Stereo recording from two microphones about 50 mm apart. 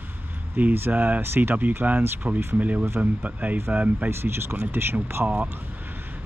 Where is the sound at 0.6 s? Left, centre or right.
Right.